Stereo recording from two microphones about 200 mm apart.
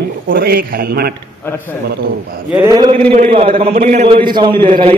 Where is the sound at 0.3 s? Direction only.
50° right (ahead or behind).